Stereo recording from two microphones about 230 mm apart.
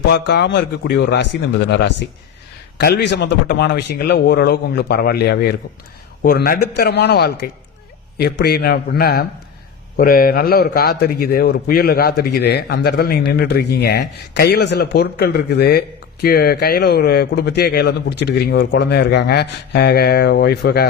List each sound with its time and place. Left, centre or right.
0.1 s a man's voice: left